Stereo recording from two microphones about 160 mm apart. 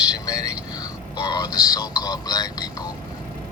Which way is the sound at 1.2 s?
25° left (ahead or behind).